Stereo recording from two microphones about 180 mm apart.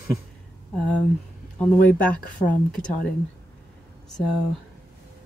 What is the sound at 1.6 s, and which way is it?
Speech, 10° left (ahead or behind).